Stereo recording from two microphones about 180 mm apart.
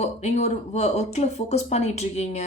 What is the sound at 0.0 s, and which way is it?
Speech, 40° left (ahead or behind).